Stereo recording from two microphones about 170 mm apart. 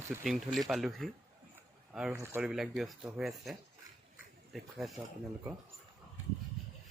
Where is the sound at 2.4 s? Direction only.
5° right (ahead or behind).